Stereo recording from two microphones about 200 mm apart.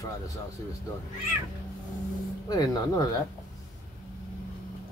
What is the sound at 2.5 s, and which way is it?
Speech, 20° left (ahead or behind).